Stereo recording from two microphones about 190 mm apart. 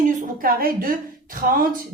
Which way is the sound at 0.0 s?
45° right (ahead or behind).